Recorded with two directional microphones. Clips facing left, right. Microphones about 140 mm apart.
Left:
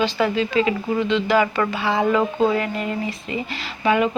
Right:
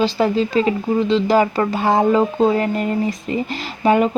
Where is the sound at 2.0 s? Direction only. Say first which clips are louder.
Right 3 dB; 30° right (ahead or behind).